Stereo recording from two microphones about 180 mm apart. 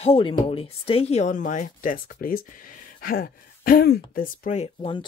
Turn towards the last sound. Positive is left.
turn(degrees=35)  # may be behind; listen again after turning